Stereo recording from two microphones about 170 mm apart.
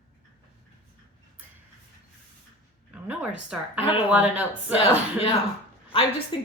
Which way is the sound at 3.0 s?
10° right (ahead or behind).